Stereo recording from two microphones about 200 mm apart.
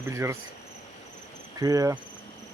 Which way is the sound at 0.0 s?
15° right (ahead or behind).